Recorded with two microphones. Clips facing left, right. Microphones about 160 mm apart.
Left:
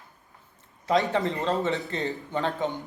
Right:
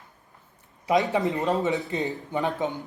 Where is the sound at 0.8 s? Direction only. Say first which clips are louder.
Right 1 dB; 15° right (ahead or behind).